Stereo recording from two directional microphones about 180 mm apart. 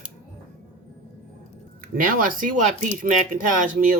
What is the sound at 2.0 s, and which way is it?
Speech, 50° right (ahead or behind).